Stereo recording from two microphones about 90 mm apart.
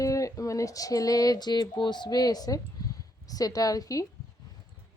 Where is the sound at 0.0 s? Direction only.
35° left (ahead or behind).